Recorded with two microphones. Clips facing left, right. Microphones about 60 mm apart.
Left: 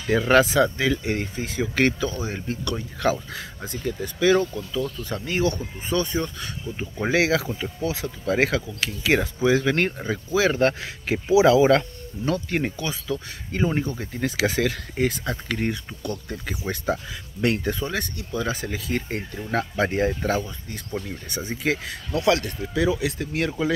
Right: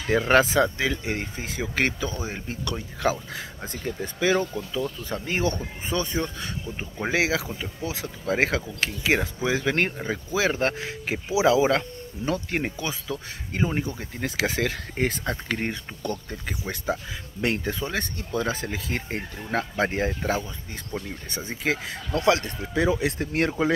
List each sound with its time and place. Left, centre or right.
0.1 s speech: right
3.6 s speech: right
7.1 s speech: centre
14.3 s speech: right
16.6 s speech: centre
17.4 s speech: right
18.1 s speech: right